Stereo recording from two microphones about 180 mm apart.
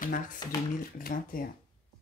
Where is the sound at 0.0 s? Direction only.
45° left (ahead or behind).